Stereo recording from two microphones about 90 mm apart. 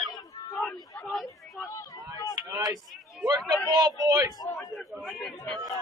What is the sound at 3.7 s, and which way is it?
Speech, 45° right (ahead or behind).